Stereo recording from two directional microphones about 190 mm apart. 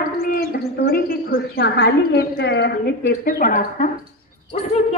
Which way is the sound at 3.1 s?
50° left (ahead or behind).